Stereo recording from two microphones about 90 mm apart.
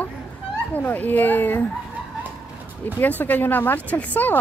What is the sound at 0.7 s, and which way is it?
Speech, 20° left (ahead or behind).